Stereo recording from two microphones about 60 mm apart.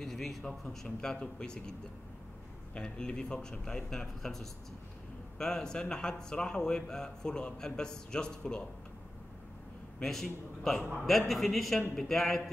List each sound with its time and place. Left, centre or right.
0.0 s speech: centre
9.9 s a man's voice: centre